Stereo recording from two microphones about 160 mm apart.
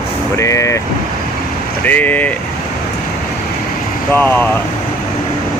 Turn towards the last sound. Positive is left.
turn(degrees=10)  # may be behind; listen again after turning